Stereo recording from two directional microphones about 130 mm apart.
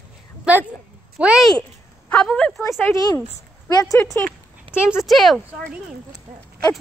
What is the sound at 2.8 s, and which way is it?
Speech, 30° left (ahead or behind).